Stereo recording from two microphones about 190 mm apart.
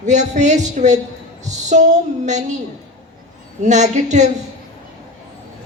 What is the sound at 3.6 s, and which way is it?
Speech, 40° right (ahead or behind).